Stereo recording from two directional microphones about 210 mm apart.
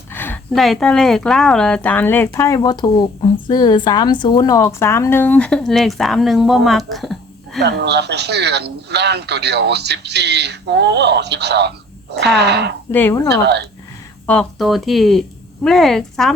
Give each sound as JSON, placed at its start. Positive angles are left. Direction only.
{"t": 0.1, "sound": "a woman's voice", "side_deg": 10}
{"t": 7.6, "sound": "speech", "side_deg": -55}
{"t": 12.9, "sound": "a woman's voice", "side_deg": 10}
{"t": 14.3, "sound": "speech", "side_deg": 0}